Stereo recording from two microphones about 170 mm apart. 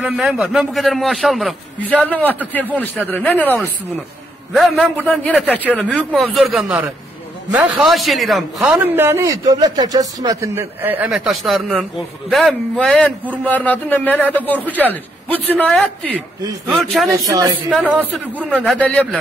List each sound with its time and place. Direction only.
0.0 s a man's voice: 5° right (ahead or behind)
2.0 s a man's voice: 10° left (ahead or behind)
8.7 s a man's voice: 15° right (ahead or behind); by 15.9 s 5° left (ahead or behind)
17.2 s speech: 20° right (ahead or behind)
17.6 s a man's voice: 5° right (ahead or behind)